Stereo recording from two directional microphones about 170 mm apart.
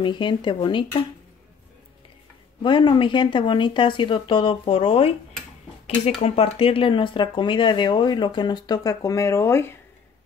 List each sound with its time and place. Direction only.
0.0 s speech: 30° left (ahead or behind)
2.6 s speech: 30° left (ahead or behind)
6.2 s speech: 35° left (ahead or behind); by 9.8 s 15° left (ahead or behind)